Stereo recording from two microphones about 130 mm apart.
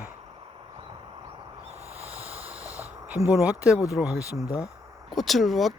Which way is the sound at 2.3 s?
15° right (ahead or behind).